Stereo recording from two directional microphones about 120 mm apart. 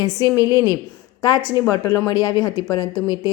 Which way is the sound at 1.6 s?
30° left (ahead or behind).